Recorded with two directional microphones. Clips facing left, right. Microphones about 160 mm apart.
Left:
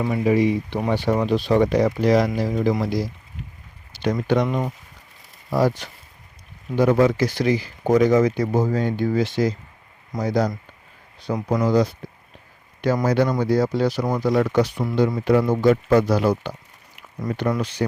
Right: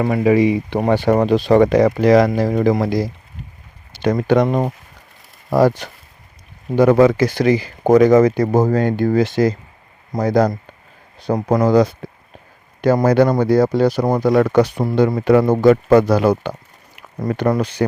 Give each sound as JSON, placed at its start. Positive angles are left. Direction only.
{"t": 0.0, "sound": "speech", "side_deg": -70}
{"t": 0.8, "sound": "speech", "side_deg": -70}
{"t": 2.4, "sound": "speech", "side_deg": -60}
{"t": 5.5, "sound": "speech", "side_deg": -60}
{"t": 6.7, "sound": "speech", "side_deg": -70}
{"t": 7.2, "sound": "speech", "side_deg": -50}
{"t": 7.4, "sound": "speech", "side_deg": -80}
{"t": 7.9, "sound": "speech", "side_deg": -60}
{"t": 11.4, "sound": "speech", "side_deg": -75}
{"t": 12.8, "sound": "speech", "side_deg": -60}